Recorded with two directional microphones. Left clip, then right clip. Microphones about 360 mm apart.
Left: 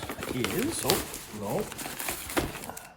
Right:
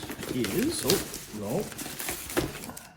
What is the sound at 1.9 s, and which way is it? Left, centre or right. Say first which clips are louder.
Horse: even; centre.